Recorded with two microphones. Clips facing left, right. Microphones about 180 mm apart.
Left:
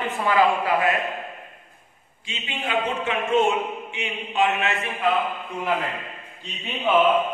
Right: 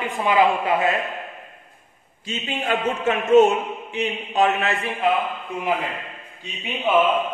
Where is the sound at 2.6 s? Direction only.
45° right (ahead or behind).